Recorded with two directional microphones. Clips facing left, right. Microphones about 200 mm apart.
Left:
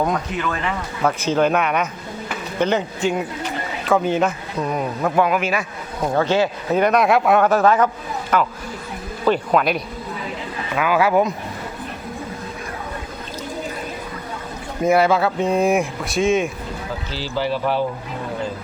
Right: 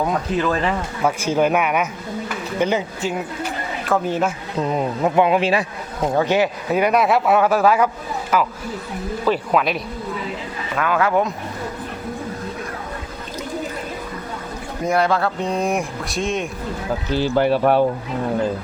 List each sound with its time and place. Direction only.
0.3 s speech: 35° right (ahead or behind)
1.0 s a man's voice: 10° right (ahead or behind)
4.6 s speech: 25° right (ahead or behind)
6.1 s speech: 15° right (ahead or behind); by 11.3 s 5° left (ahead or behind)
14.8 s speech: 5° left (ahead or behind)
17.1 s speech: 55° right (ahead or behind)